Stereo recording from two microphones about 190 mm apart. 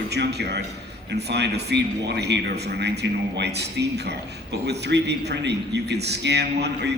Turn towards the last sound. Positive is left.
turn(degrees=-60)  # may be behind; listen again after turning